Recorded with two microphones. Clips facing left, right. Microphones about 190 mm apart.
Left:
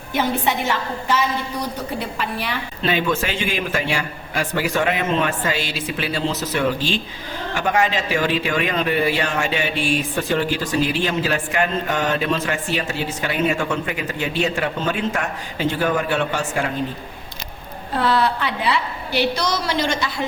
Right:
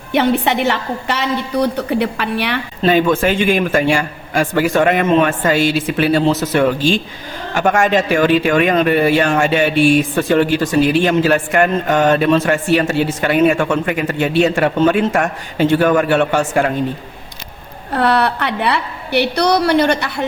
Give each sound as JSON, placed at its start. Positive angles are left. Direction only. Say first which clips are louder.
{"t": 0.1, "sound": "a woman's voice", "louder": "right 6 dB", "side_deg": -70}
{"t": 2.8, "sound": "a woman's voice", "louder": "right 8 dB", "side_deg": -50}
{"t": 17.9, "sound": "a woman's voice", "louder": "right 4 dB", "side_deg": -65}